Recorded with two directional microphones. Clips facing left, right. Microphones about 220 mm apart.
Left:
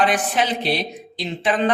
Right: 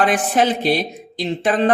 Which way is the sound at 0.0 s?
50° right (ahead or behind).